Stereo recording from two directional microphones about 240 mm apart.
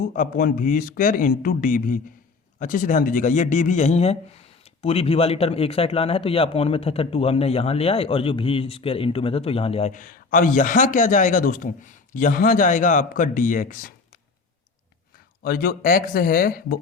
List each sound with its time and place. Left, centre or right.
0.0 s speech: left
15.4 s speech: left